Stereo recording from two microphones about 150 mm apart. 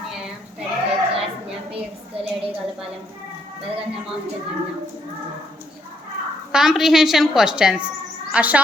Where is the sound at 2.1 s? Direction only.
40° right (ahead or behind).